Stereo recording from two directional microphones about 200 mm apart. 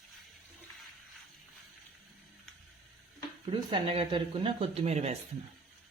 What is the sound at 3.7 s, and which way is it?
Speech, 25° right (ahead or behind).